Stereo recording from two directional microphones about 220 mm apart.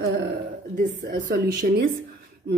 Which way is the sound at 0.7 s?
40° right (ahead or behind).